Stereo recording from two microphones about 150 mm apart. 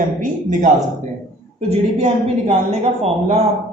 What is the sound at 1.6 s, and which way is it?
A woman's voice, 45° right (ahead or behind).